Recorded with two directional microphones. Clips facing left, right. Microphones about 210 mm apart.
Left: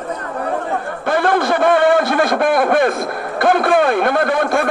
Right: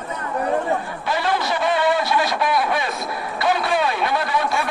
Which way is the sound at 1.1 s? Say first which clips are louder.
Left 7 dB; 55° left (ahead or behind).